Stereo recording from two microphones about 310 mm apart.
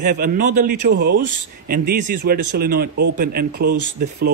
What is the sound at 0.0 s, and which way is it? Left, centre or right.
Speech, right.